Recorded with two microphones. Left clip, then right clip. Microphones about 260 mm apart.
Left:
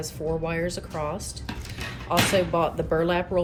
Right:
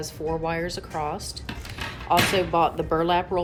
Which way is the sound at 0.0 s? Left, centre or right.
Centre.